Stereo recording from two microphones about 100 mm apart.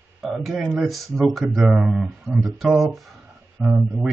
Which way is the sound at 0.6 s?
10° right (ahead or behind).